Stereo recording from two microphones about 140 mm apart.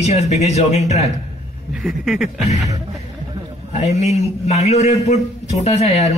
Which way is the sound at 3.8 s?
50° left (ahead or behind).